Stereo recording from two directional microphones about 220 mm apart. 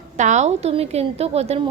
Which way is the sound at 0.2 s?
30° right (ahead or behind).